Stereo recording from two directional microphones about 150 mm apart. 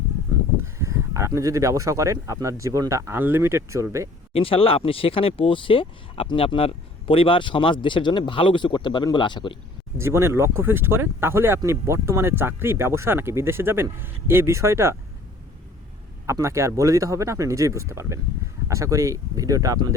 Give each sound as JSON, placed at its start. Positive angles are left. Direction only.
{"t": 0.6, "sound": "speech", "side_deg": -20}
{"t": 4.3, "sound": "speech", "side_deg": 40}
{"t": 10.0, "sound": "speech", "side_deg": -15}
{"t": 16.2, "sound": "speech", "side_deg": -20}